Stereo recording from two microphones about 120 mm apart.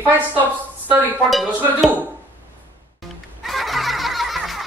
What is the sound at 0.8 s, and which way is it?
Stir, 15° right (ahead or behind).